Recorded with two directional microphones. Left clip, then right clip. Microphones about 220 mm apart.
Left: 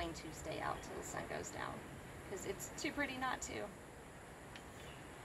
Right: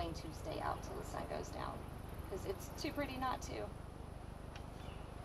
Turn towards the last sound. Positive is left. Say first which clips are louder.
# right 1 dB
turn(degrees=20)  # may be behind; listen again after turning